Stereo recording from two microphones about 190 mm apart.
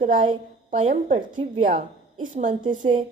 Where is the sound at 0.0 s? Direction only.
40° right (ahead or behind).